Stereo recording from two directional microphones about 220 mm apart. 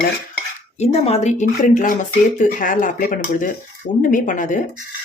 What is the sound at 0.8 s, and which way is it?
Speech, 30° left (ahead or behind).